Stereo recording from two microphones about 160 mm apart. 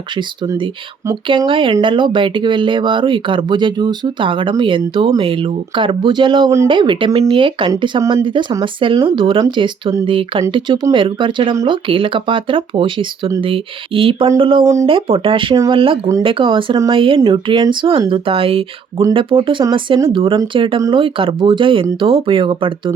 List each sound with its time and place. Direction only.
0.2 s speech: 30° right (ahead or behind)
14.6 s speech: 20° right (ahead or behind)
14.8 s speech: 35° right (ahead or behind)